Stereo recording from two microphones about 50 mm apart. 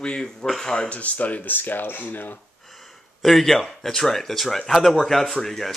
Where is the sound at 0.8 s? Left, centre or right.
Left.